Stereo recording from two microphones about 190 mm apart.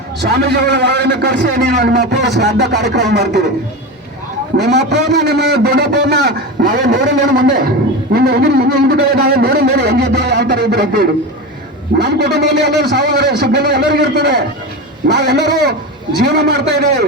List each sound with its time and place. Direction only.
0.2 s a man's voice: 60° right (ahead or behind)
4.5 s a man's voice: 60° right (ahead or behind)
8.1 s a man's voice: 55° right (ahead or behind)